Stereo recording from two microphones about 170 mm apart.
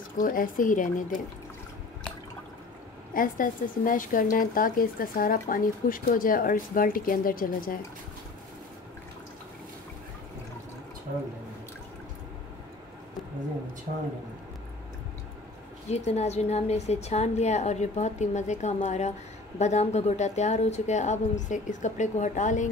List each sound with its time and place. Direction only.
0.2 s speech: 55° left (ahead or behind)
3.1 s speech: 55° left (ahead or behind)
15.9 s a woman's voice: 40° left (ahead or behind)